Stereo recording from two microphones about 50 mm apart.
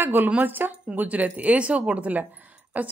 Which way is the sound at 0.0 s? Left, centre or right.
Right.